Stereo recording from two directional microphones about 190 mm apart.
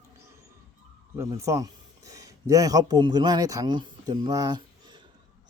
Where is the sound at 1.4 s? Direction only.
15° right (ahead or behind).